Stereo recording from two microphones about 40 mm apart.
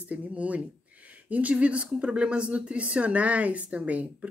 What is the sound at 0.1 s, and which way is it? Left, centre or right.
Speech, right.